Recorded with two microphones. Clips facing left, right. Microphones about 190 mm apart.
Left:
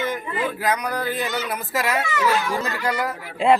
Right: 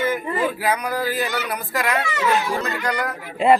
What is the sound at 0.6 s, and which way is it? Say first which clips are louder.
Speech: right 1 dB; 10° right (ahead or behind).